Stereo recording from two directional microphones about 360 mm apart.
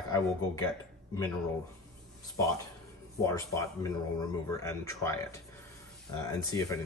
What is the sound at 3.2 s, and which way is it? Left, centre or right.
Speech, centre.